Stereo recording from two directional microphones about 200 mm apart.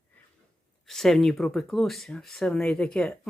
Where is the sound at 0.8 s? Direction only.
Centre (ahead or behind).